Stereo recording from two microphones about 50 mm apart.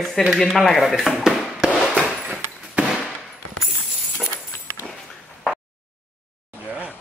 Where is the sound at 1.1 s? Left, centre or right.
Centre.